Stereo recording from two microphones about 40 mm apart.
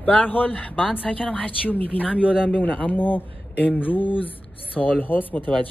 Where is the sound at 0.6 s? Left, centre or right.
Left.